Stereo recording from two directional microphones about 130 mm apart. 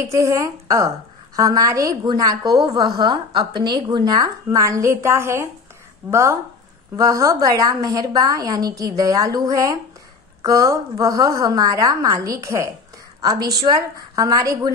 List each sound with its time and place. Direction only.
0.0 s a woman's voice: 20° right (ahead or behind)